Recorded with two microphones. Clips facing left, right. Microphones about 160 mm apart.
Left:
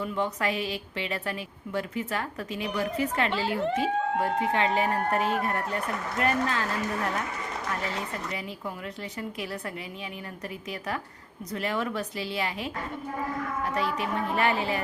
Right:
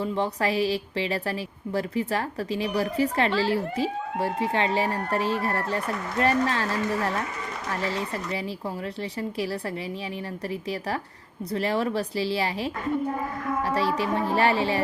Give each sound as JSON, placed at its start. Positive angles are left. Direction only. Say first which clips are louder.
{"t": 0.0, "sound": "a woman's voice", "louder": "right 3 dB", "side_deg": -35}
{"t": 7.7, "sound": "a woman's voice", "louder": "right 5 dB", "side_deg": -30}
{"t": 10.7, "sound": "a woman's voice", "louder": "right 1 dB", "side_deg": -35}